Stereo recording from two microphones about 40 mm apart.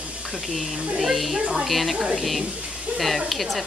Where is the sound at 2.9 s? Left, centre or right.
Centre.